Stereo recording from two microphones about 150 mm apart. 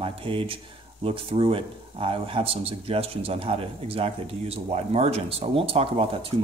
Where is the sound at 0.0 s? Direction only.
35° right (ahead or behind).